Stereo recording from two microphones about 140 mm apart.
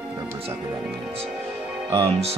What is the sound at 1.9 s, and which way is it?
Speech, 45° right (ahead or behind).